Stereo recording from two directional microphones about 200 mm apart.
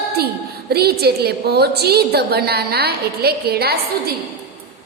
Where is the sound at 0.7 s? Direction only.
50° right (ahead or behind).